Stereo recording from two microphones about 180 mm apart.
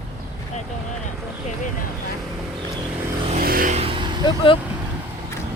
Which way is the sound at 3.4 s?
55° right (ahead or behind).